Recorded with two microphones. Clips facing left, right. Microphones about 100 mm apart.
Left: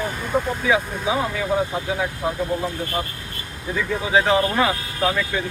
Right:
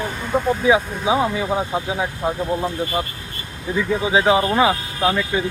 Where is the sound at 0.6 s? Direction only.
20° right (ahead or behind).